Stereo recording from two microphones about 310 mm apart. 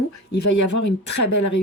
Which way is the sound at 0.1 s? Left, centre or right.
Left.